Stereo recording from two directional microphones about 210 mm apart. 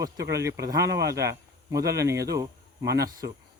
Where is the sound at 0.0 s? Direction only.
15° right (ahead or behind).